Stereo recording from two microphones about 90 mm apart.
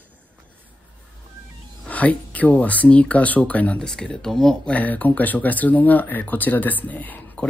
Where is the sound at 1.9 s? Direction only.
15° left (ahead or behind).